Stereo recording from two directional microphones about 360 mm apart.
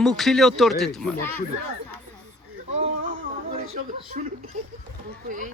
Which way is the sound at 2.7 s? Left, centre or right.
Centre.